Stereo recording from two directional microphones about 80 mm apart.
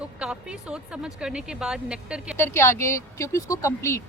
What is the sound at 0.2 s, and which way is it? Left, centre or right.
Speech, centre.